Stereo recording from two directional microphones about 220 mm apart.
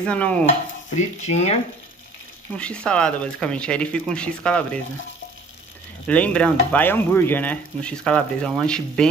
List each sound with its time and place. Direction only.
0.0 s speech: 5° left (ahead or behind)
0.8 s stir: 30° left (ahead or behind)
2.5 s speech: 5° left (ahead or behind)
6.0 s speech: 5° left (ahead or behind)